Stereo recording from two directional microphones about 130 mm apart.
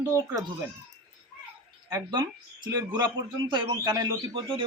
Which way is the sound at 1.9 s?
35° right (ahead or behind).